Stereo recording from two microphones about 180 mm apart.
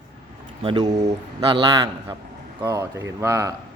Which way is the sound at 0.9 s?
40° right (ahead or behind).